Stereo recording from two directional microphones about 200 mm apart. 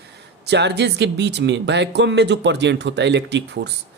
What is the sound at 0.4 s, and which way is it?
Speech, 55° right (ahead or behind).